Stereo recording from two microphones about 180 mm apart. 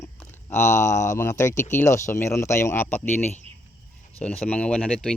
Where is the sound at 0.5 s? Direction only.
15° left (ahead or behind).